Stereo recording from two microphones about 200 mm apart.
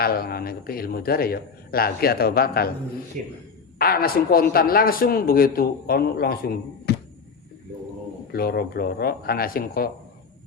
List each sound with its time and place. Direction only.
0.0 s a man's voice: 50° left (ahead or behind)
3.2 s a man's voice: 40° right (ahead or behind)
3.8 s a man's voice: 50° left (ahead or behind)
8.3 s a man's voice: 50° left (ahead or behind)